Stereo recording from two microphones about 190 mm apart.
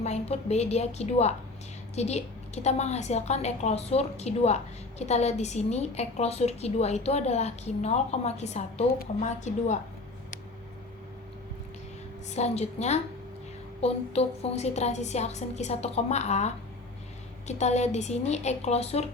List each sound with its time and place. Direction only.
0.0 s a woman's voice: 35° left (ahead or behind)
12.3 s a woman's voice: 35° left (ahead or behind)